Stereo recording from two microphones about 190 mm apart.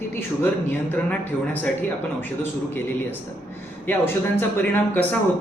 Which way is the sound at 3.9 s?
10° left (ahead or behind).